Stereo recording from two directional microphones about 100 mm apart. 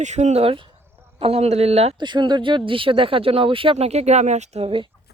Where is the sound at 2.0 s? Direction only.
50° right (ahead or behind); by 4.1 s 90° right.